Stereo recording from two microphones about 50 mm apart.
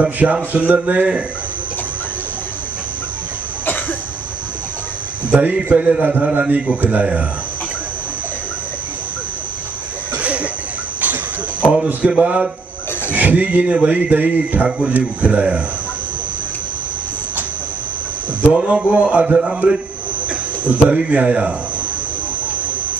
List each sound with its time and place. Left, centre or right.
0.0 s a man's voice: right
5.3 s a man's voice: right
10.1 s a sound: right
11.7 s a man's voice: centre
18.5 s a man's voice: right
20.2 s a sound: right
21.0 s a man's voice: right